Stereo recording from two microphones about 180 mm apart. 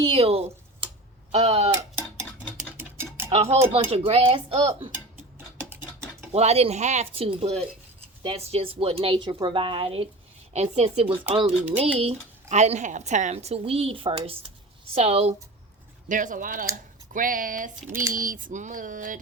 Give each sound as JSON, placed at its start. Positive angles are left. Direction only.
{"t": 0.0, "sound": "a sound", "side_deg": -30}
{"t": 1.3, "sound": "speech", "side_deg": -35}
{"t": 2.7, "sound": "a sound", "side_deg": -10}
{"t": 3.2, "sound": "speech", "side_deg": -35}
{"t": 6.3, "sound": "speech", "side_deg": -35}
{"t": 16.0, "sound": "speech", "side_deg": -45}